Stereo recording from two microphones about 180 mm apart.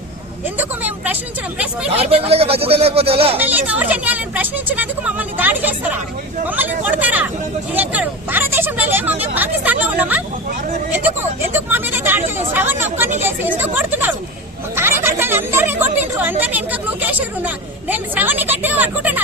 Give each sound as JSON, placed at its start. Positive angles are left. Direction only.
{"t": 0.5, "sound": "speech", "side_deg": -10}
{"t": 2.0, "sound": "speech", "side_deg": -35}
{"t": 3.3, "sound": "speech", "side_deg": -10}
{"t": 10.9, "sound": "a sound", "side_deg": -10}
{"t": 13.1, "sound": "speech", "side_deg": -10}
{"t": 14.8, "sound": "a sound", "side_deg": -15}
{"t": 16.4, "sound": "a woman's voice", "side_deg": -10}